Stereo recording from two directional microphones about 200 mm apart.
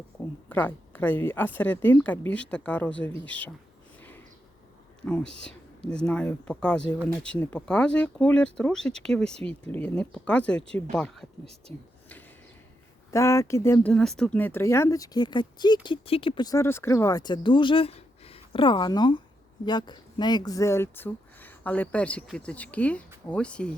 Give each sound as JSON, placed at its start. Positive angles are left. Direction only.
{"t": 0.2, "sound": "speech", "side_deg": 10}
{"t": 5.0, "sound": "speech", "side_deg": 5}
{"t": 13.1, "sound": "speech", "side_deg": 15}